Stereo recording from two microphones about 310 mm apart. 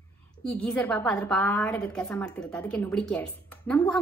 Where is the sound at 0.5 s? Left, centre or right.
Centre.